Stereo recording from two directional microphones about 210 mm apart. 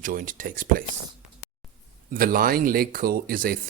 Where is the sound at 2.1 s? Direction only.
45° right (ahead or behind).